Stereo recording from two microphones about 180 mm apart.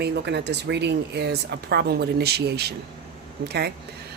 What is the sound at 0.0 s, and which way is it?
Speech, 70° right (ahead or behind).